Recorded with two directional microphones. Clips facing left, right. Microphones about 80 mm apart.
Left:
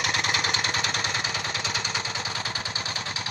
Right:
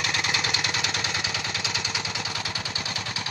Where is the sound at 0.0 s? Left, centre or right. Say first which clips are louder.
Left 1 dB; left.